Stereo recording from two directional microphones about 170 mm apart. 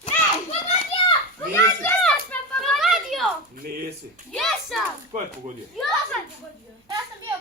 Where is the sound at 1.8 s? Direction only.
5° left (ahead or behind).